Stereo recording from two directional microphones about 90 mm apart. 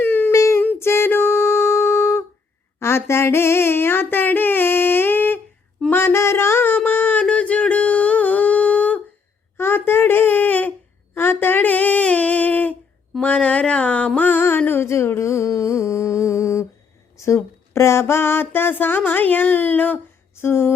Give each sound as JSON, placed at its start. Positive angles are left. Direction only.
{"t": 0.0, "sound": "child singing", "side_deg": 25}
{"t": 0.3, "sound": "child singing", "side_deg": 35}
{"t": 0.6, "sound": "a sound", "side_deg": 25}
{"t": 14.2, "sound": "music", "side_deg": 20}
{"t": 14.7, "sound": "humming", "side_deg": 30}
{"t": 17.2, "sound": "a sound", "side_deg": 35}